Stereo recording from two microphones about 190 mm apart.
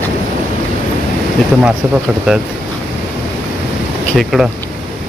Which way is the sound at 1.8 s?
10° right (ahead or behind).